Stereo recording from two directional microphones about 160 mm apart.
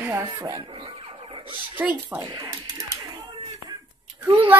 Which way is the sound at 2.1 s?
20° right (ahead or behind).